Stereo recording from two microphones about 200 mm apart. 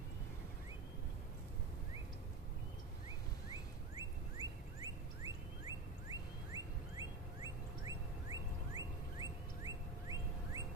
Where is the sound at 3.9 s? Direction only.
15° right (ahead or behind).